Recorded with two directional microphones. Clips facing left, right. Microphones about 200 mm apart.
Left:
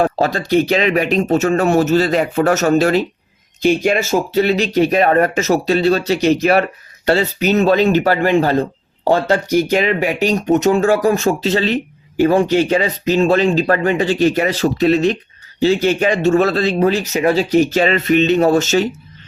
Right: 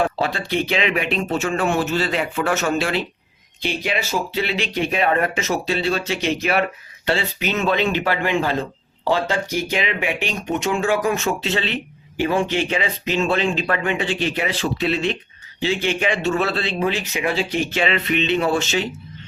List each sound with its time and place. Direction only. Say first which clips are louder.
0.0 s speech: left 5 dB; 40° left (ahead or behind)